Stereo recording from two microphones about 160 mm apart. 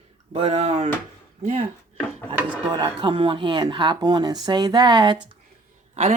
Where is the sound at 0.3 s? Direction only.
40° right (ahead or behind).